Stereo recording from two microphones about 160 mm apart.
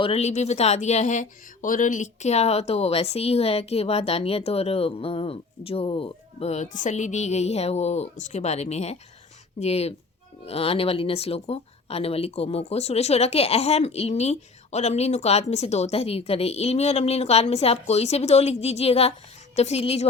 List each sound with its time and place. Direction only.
0.0 s speech: 40° left (ahead or behind)